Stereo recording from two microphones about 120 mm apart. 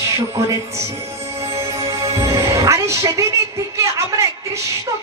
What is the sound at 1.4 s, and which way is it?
Music, 25° right (ahead or behind).